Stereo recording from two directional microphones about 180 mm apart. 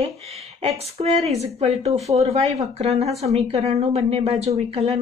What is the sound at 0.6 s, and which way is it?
Speech, 35° right (ahead or behind).